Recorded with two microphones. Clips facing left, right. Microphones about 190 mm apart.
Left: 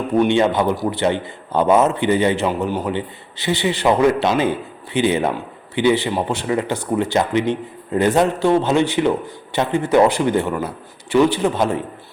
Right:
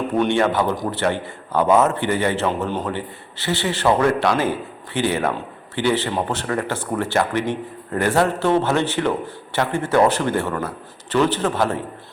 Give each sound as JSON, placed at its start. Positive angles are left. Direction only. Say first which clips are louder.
{"t": 0.2, "sound": "a man's voice", "louder": "left 3 dB", "side_deg": 20}